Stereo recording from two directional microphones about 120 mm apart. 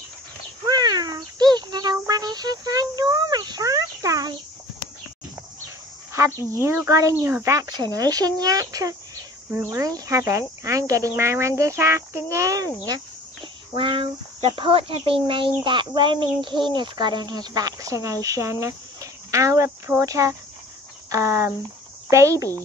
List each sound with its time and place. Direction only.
0.7 s a sound: 35° right (ahead or behind)
6.1 s speech: 20° right (ahead or behind)
9.5 s speech: 20° right (ahead or behind)
13.7 s a child's voice: 45° right (ahead or behind); by 22.5 s 25° right (ahead or behind)